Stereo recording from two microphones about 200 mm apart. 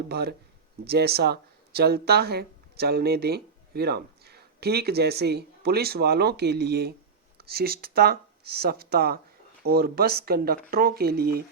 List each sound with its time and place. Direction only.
0.1 s speech: 50° right (ahead or behind)